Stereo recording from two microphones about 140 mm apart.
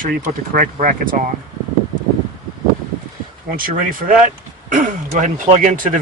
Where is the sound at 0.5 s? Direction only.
75° right (ahead or behind).